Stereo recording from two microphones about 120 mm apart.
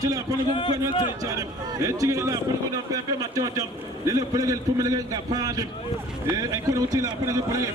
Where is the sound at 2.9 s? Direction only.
30° right (ahead or behind).